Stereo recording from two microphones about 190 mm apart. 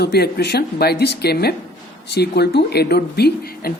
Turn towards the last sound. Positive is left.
turn(degrees=55)  # may be behind; listen again after turning